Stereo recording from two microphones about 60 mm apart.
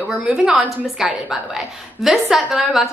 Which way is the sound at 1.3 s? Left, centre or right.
Centre.